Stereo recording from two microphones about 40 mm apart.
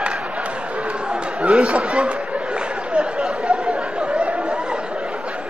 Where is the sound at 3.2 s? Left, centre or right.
Centre.